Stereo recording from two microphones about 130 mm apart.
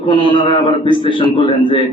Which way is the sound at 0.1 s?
40° left (ahead or behind).